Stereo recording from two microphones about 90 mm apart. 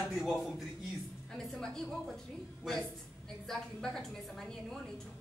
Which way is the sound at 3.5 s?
5° left (ahead or behind).